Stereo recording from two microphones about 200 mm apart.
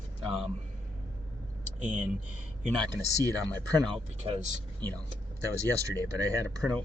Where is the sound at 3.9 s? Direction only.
30° right (ahead or behind).